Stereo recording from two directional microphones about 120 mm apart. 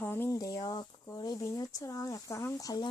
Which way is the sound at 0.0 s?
20° left (ahead or behind).